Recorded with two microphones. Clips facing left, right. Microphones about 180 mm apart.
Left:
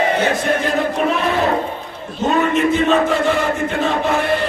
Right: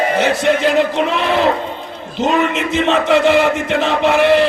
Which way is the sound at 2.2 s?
90° right.